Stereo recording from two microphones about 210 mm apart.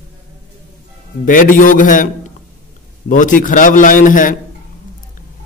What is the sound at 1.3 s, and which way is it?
A man's voice, 40° left (ahead or behind).